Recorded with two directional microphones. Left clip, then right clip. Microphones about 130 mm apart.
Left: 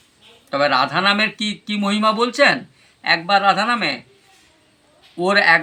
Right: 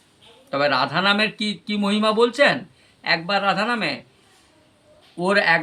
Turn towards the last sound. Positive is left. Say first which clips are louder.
# left 4 dB
turn(degrees=-25)  # may be behind; listen again after turning